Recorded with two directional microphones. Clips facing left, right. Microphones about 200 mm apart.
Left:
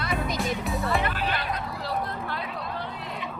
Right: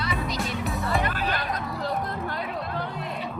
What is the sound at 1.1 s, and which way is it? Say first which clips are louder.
Music: right 1 dB; 45° right (ahead or behind).